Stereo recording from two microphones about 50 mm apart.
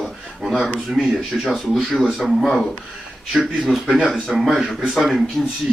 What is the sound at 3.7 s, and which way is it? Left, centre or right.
A man's voice, centre.